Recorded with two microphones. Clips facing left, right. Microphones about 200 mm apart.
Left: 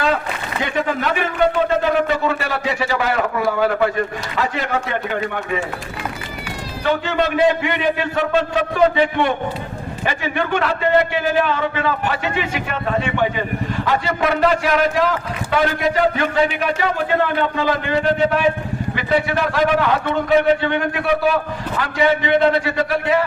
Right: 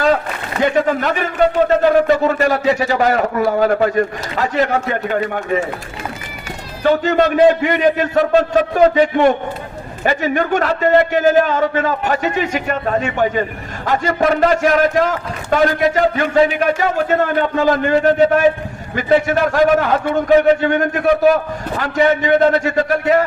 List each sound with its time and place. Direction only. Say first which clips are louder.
0.6 s a man's voice: right 6 dB; 40° right (ahead or behind)
6.8 s a man's voice: right 6 dB; 40° right (ahead or behind)